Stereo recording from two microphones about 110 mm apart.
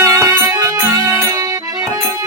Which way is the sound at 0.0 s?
25° right (ahead or behind).